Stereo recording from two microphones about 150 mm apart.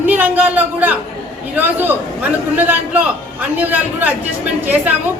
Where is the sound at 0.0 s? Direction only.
10° right (ahead or behind).